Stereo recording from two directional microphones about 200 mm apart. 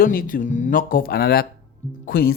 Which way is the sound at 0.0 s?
45° left (ahead or behind).